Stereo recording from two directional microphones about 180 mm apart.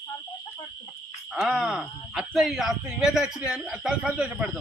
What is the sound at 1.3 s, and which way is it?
Speech, centre (ahead or behind).